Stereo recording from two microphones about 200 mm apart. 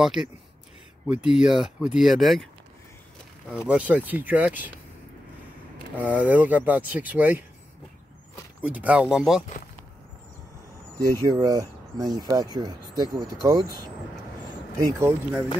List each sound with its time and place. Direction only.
0.0 s speech: centre (ahead or behind)
3.6 s speech: 5° right (ahead or behind)
5.9 s speech: 10° right (ahead or behind)
8.6 s speech: 5° right (ahead or behind)
11.0 s speech: 15° right (ahead or behind)
14.8 s speech: 15° right (ahead or behind)